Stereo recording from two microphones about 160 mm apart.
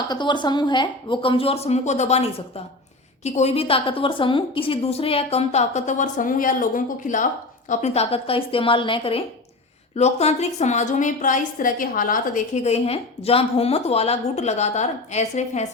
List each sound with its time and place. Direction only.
0.1 s a woman's voice: 30° left (ahead or behind); by 7.3 s 55° left (ahead or behind)
7.7 s a woman's voice: 45° left (ahead or behind)